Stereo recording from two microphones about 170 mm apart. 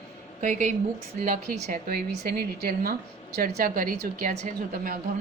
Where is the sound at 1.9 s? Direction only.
60° right (ahead or behind).